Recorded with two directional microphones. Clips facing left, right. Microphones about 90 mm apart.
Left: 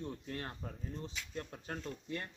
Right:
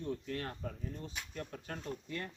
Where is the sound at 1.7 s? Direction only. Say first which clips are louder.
Left 1 dB; 30° left (ahead or behind).